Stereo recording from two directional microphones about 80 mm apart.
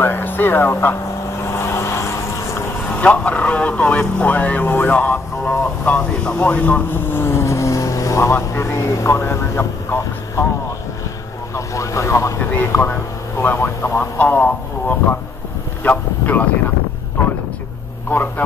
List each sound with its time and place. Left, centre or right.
0.0 s speech: left
1.5 s vehicle: left
3.0 s speech: centre
11.5 s speech: left
12.4 s speech: left